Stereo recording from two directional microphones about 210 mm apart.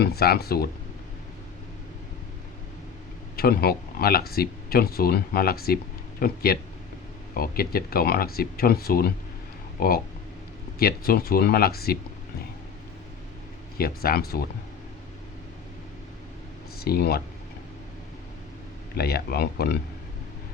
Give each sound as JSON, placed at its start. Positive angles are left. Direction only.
{"t": 0.0, "sound": "speech", "side_deg": 50}
{"t": 3.3, "sound": "speech", "side_deg": 45}
{"t": 13.7, "sound": "speech", "side_deg": 45}
{"t": 16.8, "sound": "speech", "side_deg": 50}
{"t": 18.9, "sound": "speech", "side_deg": 50}